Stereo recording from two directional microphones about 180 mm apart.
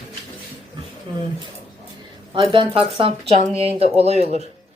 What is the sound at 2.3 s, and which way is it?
A man's voice, 30° right (ahead or behind).